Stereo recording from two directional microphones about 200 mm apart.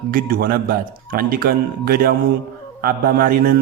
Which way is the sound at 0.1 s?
45° right (ahead or behind).